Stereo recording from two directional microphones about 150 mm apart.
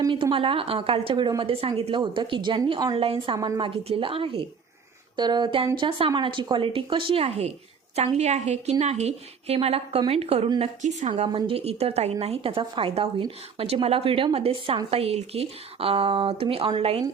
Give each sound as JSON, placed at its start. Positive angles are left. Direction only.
{"t": 0.0, "sound": "a woman's voice", "side_deg": -35}
{"t": 3.3, "sound": "speech", "side_deg": -25}
{"t": 3.6, "sound": "a woman's voice", "side_deg": -40}
{"t": 10.6, "sound": "a woman's voice", "side_deg": -50}
{"t": 11.1, "sound": "a woman's voice", "side_deg": -35}